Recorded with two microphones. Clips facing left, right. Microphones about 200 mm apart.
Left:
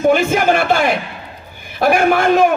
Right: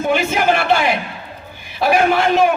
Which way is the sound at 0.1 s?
50° left (ahead or behind).